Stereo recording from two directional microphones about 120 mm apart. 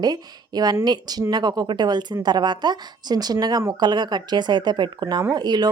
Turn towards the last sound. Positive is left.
turn(degrees=-35)  # may be behind; listen again after turning